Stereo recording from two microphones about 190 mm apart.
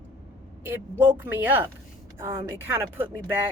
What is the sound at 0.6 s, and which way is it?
A woman's voice, 10° right (ahead or behind).